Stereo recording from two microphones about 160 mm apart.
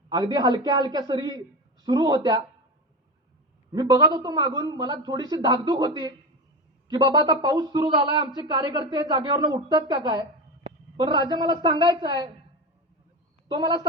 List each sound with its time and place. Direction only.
0.1 s a man's voice: 25° right (ahead or behind)
3.7 s a man's voice: 25° right (ahead or behind)
13.5 s a man's voice: 25° right (ahead or behind)